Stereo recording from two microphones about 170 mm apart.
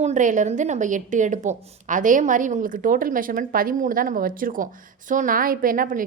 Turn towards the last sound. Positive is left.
turn(degrees=-55)  # may be behind; listen again after turning